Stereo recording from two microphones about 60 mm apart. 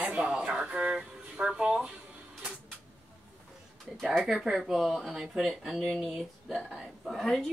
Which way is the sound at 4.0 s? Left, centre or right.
Centre.